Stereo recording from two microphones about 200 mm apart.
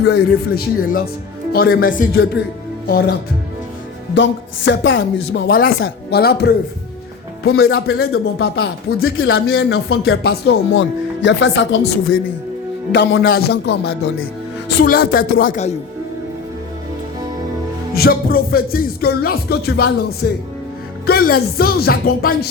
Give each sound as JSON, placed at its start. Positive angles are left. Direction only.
{"t": 0.0, "sound": "music", "side_deg": 55}
{"t": 4.1, "sound": "speech", "side_deg": 60}
{"t": 5.8, "sound": "speech", "side_deg": 55}
{"t": 7.4, "sound": "music", "side_deg": 50}
{"t": 9.1, "sound": "speech", "side_deg": 90}
{"t": 9.6, "sound": "music", "side_deg": 55}
{"t": 10.8, "sound": "speech", "side_deg": 65}
{"t": 13.2, "sound": "music", "side_deg": 50}
{"t": 17.9, "sound": "music", "side_deg": 50}